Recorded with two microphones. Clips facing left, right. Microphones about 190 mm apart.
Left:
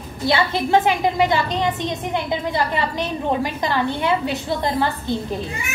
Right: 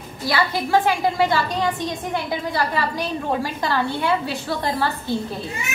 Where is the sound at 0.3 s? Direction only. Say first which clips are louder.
Left 2 dB; 20° left (ahead or behind).